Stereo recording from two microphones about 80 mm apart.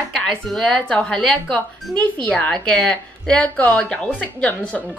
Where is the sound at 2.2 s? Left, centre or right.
Centre.